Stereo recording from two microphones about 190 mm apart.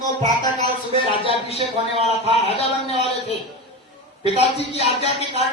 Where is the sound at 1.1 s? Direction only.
30° left (ahead or behind).